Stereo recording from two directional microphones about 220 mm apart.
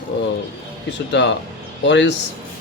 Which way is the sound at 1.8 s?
55° left (ahead or behind).